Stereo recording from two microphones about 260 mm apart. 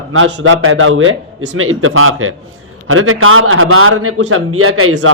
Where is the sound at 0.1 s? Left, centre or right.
Right.